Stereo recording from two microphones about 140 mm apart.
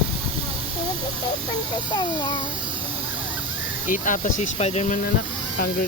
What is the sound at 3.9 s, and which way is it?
Speech, 65° left (ahead or behind).